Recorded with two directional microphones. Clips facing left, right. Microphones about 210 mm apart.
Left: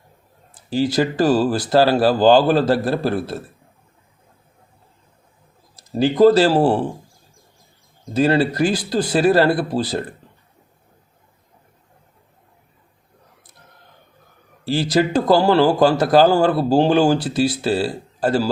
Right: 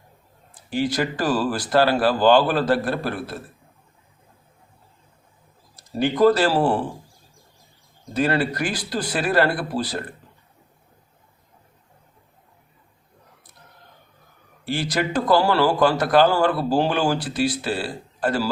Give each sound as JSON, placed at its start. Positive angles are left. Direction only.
{"t": 0.7, "sound": "speech", "side_deg": 30}
{"t": 6.0, "sound": "speech", "side_deg": 25}
{"t": 8.1, "sound": "speech", "side_deg": 25}
{"t": 14.6, "sound": "speech", "side_deg": 30}